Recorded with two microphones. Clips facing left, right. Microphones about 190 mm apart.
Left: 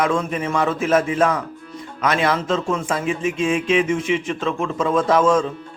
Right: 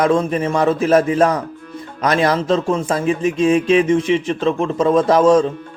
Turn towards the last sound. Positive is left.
turn(degrees=-35)  # may be behind; listen again after turning